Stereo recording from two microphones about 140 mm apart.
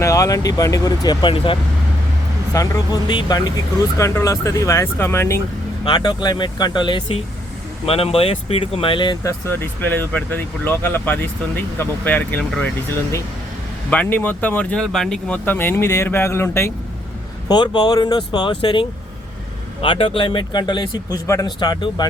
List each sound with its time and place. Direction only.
0.0 s speech: 25° left (ahead or behind)
2.5 s speech: 25° left (ahead or behind)
5.8 s speech: 35° left (ahead or behind)
9.2 s speech: 15° left (ahead or behind)
17.5 s speech: 30° left (ahead or behind)
21.2 s speech: 20° left (ahead or behind)
21.6 s speech: 30° left (ahead or behind)